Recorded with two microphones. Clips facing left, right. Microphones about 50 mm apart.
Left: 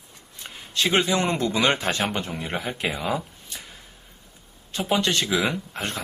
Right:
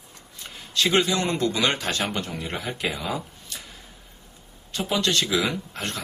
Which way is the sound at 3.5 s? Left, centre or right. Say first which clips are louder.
Even; centre.